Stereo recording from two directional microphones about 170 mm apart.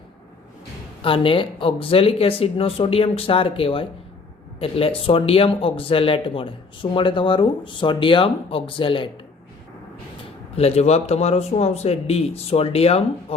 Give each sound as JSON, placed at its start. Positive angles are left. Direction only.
{"t": 1.0, "sound": "speech", "side_deg": 30}
{"t": 10.6, "sound": "speech", "side_deg": 40}